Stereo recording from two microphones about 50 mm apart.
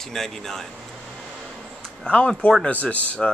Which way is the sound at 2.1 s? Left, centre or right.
Centre.